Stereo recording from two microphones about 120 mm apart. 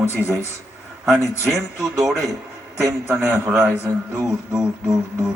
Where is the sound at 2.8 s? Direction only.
25° right (ahead or behind).